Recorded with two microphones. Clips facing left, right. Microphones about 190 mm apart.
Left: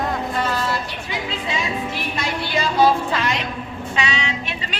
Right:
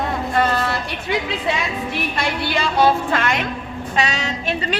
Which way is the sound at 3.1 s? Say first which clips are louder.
Right 2 dB; 55° right (ahead or behind).